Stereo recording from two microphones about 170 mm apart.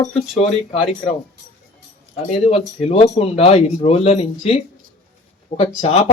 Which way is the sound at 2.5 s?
35° left (ahead or behind).